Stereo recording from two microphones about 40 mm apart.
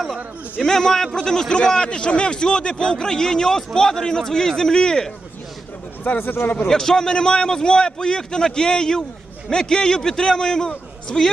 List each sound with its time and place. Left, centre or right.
0.6 s a man's voice: centre
6.1 s speech: left
6.7 s a man's voice: centre